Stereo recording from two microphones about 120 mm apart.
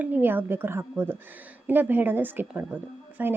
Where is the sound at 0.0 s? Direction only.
15° right (ahead or behind).